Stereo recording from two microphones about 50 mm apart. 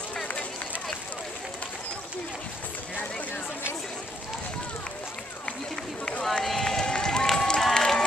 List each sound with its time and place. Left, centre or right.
0.1 s run: left
6.2 s run: centre
7.2 s a sound: centre